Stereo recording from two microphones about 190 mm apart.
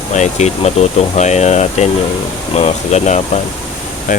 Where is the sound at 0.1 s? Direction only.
35° left (ahead or behind).